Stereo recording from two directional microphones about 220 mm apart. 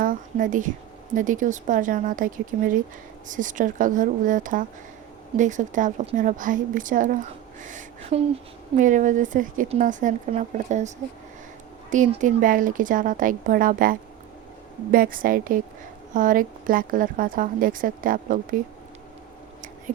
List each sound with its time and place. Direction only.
0.0 s speech: 40° right (ahead or behind)
14.9 s speech: 40° right (ahead or behind)